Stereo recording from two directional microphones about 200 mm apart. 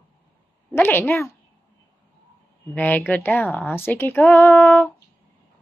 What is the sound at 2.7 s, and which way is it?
A woman's voice, 10° left (ahead or behind).